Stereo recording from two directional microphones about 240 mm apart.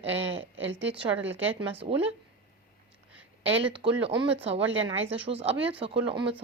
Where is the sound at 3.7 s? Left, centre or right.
Centre.